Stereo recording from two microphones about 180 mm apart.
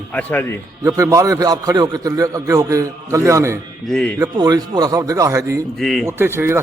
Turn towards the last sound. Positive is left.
turn(degrees=-15)  # may be behind; listen again after turning